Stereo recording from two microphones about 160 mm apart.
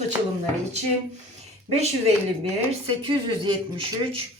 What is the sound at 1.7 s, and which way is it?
A woman's voice, 40° right (ahead or behind).